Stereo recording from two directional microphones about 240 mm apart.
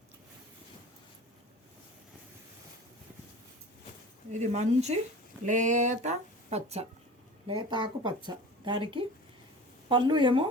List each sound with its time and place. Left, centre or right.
4.3 s speech: right